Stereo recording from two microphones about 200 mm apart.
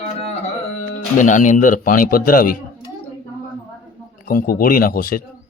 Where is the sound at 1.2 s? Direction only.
40° left (ahead or behind).